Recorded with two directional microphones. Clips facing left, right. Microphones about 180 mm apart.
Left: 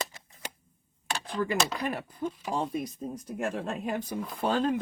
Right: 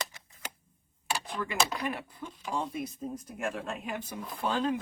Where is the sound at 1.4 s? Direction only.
45° left (ahead or behind).